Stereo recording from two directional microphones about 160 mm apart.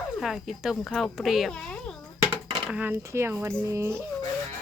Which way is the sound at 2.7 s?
10° right (ahead or behind).